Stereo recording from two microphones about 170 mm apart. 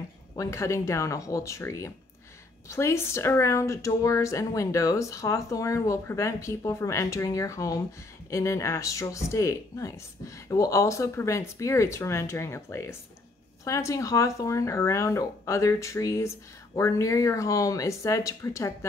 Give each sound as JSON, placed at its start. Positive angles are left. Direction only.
{"t": 0.4, "sound": "speech", "side_deg": 15}